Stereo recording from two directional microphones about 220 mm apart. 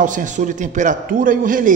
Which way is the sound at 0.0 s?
35° right (ahead or behind).